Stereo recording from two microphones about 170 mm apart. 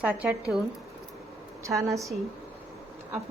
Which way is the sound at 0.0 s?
5° right (ahead or behind).